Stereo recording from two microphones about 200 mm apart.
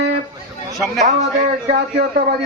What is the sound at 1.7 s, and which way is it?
Speech, 55° right (ahead or behind).